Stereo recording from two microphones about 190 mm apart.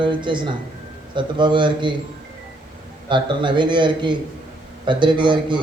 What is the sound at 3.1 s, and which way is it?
A man's voice, 25° right (ahead or behind).